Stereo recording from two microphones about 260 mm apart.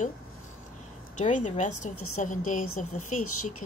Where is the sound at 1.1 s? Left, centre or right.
Left.